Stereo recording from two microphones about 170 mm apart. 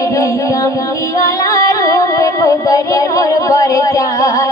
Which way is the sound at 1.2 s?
20° left (ahead or behind).